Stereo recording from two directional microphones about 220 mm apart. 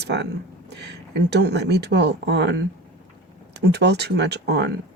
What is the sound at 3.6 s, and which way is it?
Speech, 50° right (ahead or behind).